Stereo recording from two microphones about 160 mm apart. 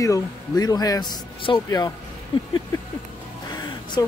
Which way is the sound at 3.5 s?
25° left (ahead or behind).